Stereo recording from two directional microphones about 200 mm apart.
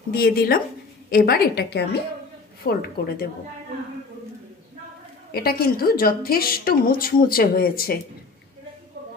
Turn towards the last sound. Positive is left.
turn(degrees=50)  # may be behind; listen again after turning